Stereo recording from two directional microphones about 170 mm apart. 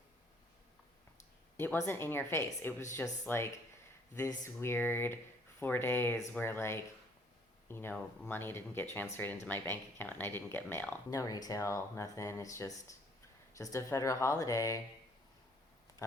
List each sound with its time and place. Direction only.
1.5 s speech: 15° left (ahead or behind)